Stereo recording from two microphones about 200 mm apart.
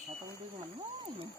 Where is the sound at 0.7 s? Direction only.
25° right (ahead or behind).